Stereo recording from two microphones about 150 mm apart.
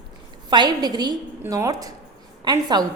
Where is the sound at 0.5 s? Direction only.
30° right (ahead or behind).